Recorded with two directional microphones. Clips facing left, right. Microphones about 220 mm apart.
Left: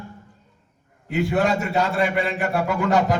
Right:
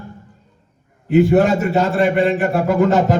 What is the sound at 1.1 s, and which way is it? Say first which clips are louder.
A man's voice: right 8 dB; 45° right (ahead or behind).